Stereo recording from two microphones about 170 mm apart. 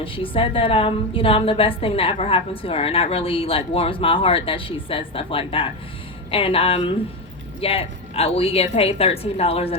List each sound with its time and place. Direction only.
0.0 s a woman's voice: 30° left (ahead or behind)